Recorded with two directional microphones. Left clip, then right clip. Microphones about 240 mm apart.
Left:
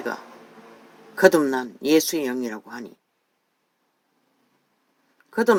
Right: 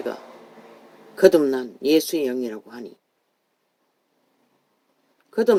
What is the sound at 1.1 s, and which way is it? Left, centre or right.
Speech, left.